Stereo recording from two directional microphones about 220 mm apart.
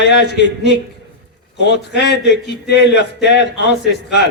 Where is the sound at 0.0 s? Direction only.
50° left (ahead or behind).